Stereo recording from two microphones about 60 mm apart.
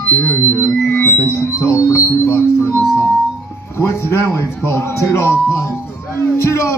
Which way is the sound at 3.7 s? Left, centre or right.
Left.